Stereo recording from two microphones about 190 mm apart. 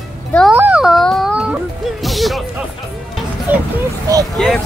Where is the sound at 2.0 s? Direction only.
Centre (ahead or behind).